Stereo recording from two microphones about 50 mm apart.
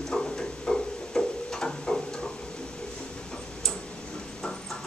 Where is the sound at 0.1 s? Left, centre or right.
Centre.